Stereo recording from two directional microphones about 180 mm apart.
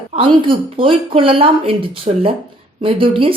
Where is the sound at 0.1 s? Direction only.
30° right (ahead or behind).